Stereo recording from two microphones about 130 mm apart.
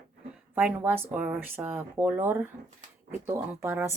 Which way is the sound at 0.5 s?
15° right (ahead or behind).